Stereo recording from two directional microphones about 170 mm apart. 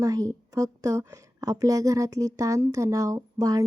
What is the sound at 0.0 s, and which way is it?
A woman's voice, 20° right (ahead or behind).